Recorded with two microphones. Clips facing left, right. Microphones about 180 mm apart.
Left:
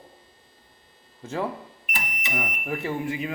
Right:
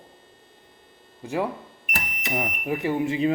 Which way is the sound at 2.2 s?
30° right (ahead or behind).